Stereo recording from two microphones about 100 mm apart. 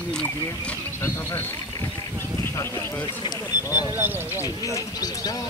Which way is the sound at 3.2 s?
45° left (ahead or behind).